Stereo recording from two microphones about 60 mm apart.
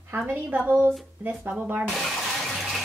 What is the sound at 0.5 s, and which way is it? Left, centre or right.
Speech, right.